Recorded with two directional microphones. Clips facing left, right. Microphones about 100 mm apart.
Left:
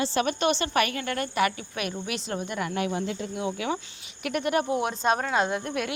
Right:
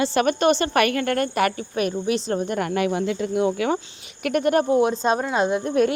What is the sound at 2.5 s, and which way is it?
A woman's voice, 55° right (ahead or behind).